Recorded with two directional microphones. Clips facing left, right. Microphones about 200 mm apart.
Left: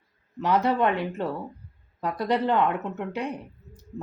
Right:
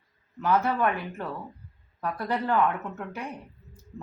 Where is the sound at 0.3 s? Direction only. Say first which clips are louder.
Left 2 dB; 20° left (ahead or behind).